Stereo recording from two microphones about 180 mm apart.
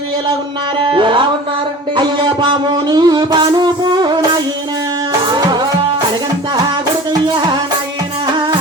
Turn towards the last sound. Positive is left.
turn(degrees=-25)  # may be behind; listen again after turning